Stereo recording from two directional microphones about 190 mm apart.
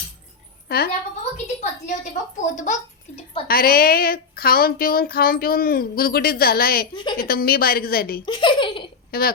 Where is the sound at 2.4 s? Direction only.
40° left (ahead or behind).